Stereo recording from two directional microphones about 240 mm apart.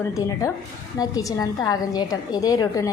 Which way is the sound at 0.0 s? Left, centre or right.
Centre.